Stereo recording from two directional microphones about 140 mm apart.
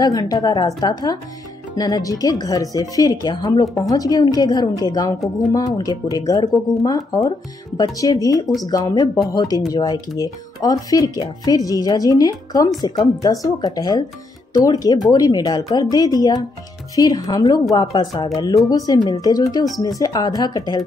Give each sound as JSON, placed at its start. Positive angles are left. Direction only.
{"t": 0.0, "sound": "speech", "side_deg": 25}